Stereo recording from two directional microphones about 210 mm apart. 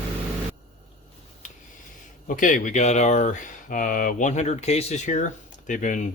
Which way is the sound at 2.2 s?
40° left (ahead or behind).